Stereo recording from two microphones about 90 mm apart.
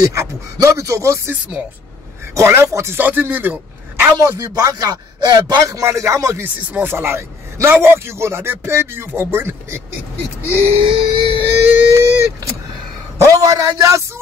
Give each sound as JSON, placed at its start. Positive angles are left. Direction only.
{"t": 0.0, "sound": "speech", "side_deg": -35}
{"t": 2.3, "sound": "speech", "side_deg": -30}
{"t": 4.2, "sound": "speech", "side_deg": -35}
{"t": 6.7, "sound": "a man's voice", "side_deg": -25}
{"t": 10.8, "sound": "music", "side_deg": -70}
{"t": 11.3, "sound": "speech", "side_deg": -20}
{"t": 13.2, "sound": "speech", "side_deg": -40}